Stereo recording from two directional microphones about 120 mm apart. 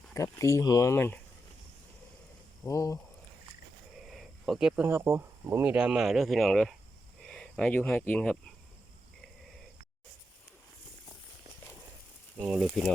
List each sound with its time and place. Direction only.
0.1 s speech: 25° left (ahead or behind)
2.6 s speech: 25° left (ahead or behind)
4.1 s a sound: centre (ahead or behind)
4.8 s speech: 20° right (ahead or behind)
5.7 s speech: 5° right (ahead or behind)
12.5 s speech: centre (ahead or behind)